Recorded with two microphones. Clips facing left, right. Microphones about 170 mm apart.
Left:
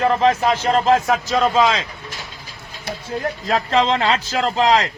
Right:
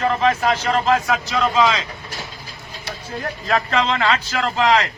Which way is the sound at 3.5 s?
25° left (ahead or behind).